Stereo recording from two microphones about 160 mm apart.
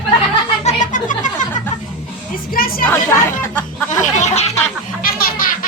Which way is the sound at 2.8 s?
15° left (ahead or behind).